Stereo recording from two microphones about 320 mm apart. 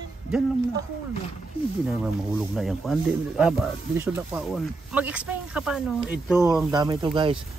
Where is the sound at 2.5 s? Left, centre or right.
Centre.